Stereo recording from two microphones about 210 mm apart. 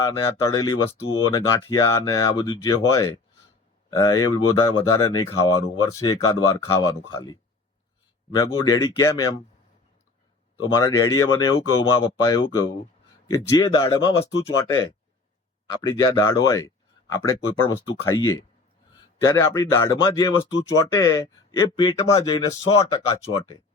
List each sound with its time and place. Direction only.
0.0 s speech: 20° left (ahead or behind)
8.4 s speech: 20° left (ahead or behind)
10.8 s speech: 15° left (ahead or behind)
14.6 s speech: 15° left (ahead or behind)